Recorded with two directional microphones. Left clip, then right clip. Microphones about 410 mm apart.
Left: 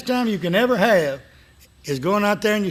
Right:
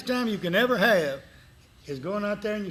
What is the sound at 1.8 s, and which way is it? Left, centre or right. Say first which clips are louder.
Speech: left 10 dB; left.